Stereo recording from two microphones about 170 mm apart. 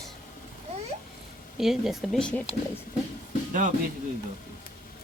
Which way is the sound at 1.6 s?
Centre (ahead or behind).